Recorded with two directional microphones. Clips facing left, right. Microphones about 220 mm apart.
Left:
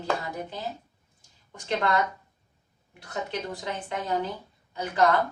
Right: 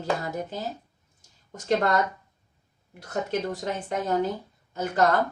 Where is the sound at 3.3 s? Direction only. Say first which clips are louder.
Right 6 dB; 40° right (ahead or behind).